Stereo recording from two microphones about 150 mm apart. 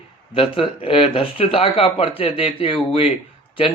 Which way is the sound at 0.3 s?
40° left (ahead or behind).